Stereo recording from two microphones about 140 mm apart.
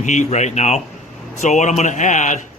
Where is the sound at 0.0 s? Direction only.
60° left (ahead or behind).